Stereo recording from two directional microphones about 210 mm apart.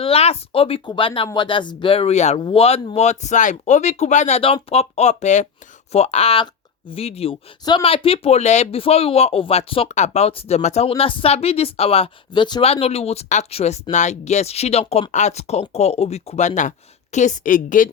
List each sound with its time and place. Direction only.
0.0 s speech: 30° left (ahead or behind)